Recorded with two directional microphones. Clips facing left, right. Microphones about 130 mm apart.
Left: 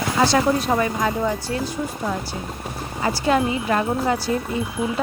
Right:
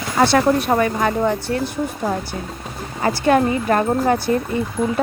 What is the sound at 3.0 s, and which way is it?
Speech, 50° right (ahead or behind).